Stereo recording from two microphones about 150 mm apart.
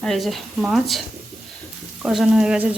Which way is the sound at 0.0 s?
Centre (ahead or behind).